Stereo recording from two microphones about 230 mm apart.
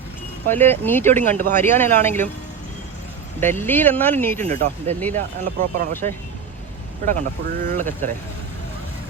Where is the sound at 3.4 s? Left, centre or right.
Centre.